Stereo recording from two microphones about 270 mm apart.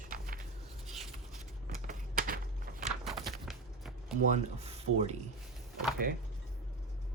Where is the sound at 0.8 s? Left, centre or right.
Centre.